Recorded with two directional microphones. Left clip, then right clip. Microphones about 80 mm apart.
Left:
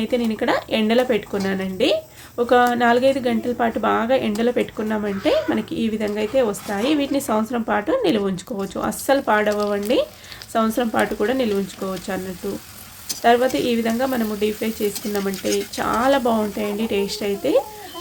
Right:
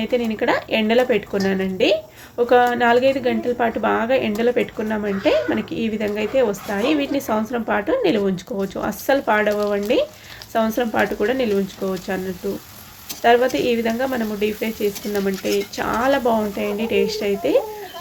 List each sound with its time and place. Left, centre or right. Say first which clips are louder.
0.0 s speech: right 1 dB; left
13.2 s speech: right 1 dB; left